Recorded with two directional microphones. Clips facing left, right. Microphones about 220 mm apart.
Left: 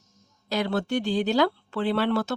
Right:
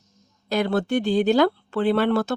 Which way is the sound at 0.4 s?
50° right (ahead or behind).